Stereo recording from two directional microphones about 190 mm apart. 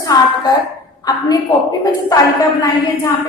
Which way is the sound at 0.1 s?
20° left (ahead or behind).